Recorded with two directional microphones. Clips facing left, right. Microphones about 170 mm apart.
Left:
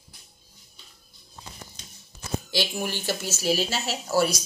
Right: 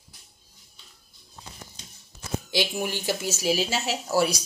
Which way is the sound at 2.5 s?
15° right (ahead or behind).